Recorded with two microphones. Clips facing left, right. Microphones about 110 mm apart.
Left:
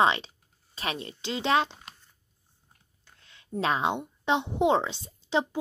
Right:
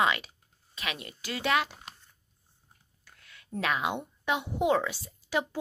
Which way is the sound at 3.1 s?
25° left (ahead or behind).